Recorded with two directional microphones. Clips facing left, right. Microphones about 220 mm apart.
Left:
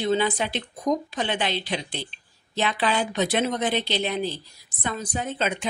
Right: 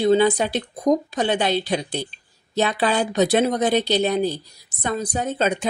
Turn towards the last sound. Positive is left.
turn(degrees=-40)  # may be behind; listen again after turning